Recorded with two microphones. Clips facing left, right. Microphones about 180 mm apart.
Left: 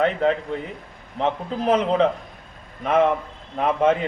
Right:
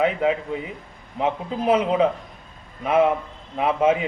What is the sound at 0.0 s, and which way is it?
Speech, 5° right (ahead or behind).